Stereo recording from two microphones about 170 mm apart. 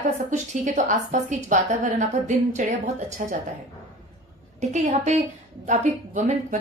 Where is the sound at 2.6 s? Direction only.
45° right (ahead or behind).